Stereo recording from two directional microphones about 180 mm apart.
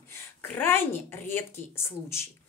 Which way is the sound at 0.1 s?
10° left (ahead or behind).